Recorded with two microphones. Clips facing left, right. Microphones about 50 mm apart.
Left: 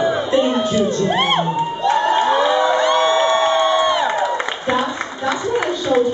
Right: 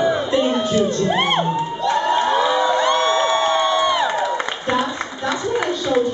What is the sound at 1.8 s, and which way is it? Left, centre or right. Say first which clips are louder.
Crowd: left 2 dB; centre.